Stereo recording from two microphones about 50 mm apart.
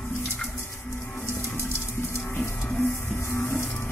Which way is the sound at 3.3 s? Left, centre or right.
Left.